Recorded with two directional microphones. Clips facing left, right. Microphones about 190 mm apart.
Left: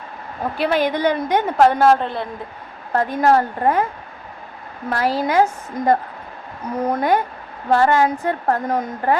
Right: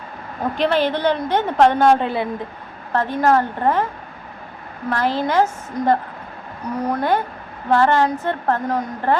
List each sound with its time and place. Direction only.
0.5 s a woman's voice: 10° left (ahead or behind)
2.9 s a woman's voice: 10° left (ahead or behind)
4.9 s a woman's voice: 10° left (ahead or behind)